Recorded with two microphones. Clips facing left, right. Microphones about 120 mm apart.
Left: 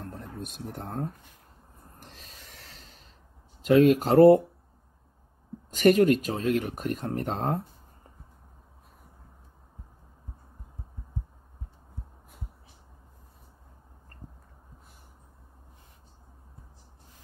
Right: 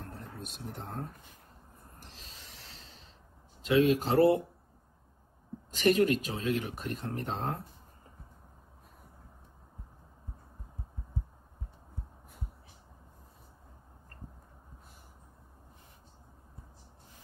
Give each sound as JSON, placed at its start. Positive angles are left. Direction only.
{"t": 0.2, "sound": "speech", "side_deg": 50}
{"t": 2.1, "sound": "a sound", "side_deg": 50}
{"t": 3.6, "sound": "speech", "side_deg": 50}
{"t": 5.8, "sound": "speech", "side_deg": 50}